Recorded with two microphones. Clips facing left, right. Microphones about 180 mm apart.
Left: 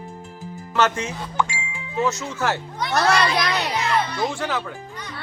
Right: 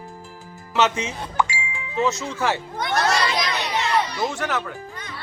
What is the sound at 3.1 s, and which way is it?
Speech, 60° left (ahead or behind).